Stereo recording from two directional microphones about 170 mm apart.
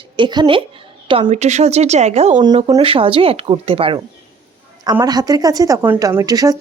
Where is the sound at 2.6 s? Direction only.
25° right (ahead or behind).